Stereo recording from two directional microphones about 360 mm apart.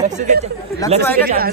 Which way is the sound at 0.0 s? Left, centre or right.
Centre.